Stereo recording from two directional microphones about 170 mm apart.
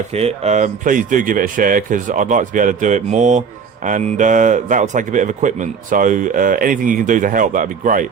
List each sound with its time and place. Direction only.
0.1 s speech: 35° right (ahead or behind)